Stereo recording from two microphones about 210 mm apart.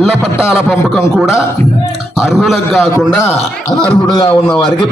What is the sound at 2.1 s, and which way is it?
Speech, centre (ahead or behind).